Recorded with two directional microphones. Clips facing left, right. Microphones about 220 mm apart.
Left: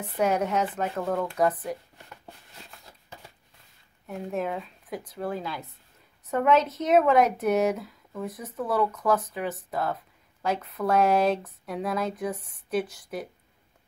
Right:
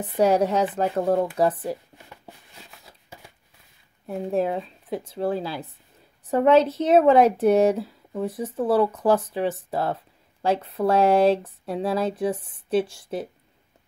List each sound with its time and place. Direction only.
0.2 s speech: 35° right (ahead or behind)
2.0 s a sound: 5° right (ahead or behind)
4.3 s speech: 30° right (ahead or behind)